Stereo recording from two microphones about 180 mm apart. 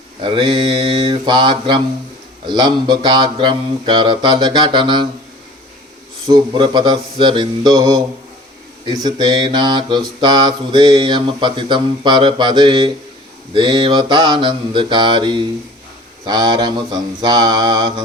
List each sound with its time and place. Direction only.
0.2 s speech: 30° right (ahead or behind)
6.2 s speech: 25° right (ahead or behind)